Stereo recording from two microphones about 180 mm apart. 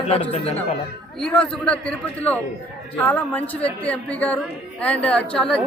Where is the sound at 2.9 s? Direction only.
10° left (ahead or behind).